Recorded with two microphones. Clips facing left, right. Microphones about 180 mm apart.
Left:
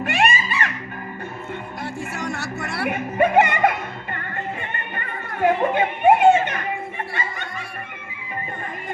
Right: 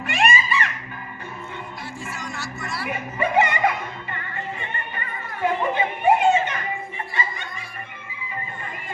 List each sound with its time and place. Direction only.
0.0 s music: 45° left (ahead or behind)
1.8 s music: 65° left (ahead or behind)
7.1 s snicker: 55° left (ahead or behind)